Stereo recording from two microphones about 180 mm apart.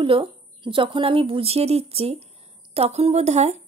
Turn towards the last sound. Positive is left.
turn(degrees=-40)  # may be behind; listen again after turning